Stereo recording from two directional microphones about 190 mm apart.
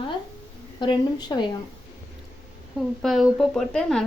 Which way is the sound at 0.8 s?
25° left (ahead or behind).